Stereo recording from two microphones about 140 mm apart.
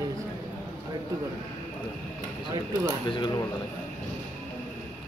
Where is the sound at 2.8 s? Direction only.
30° left (ahead or behind).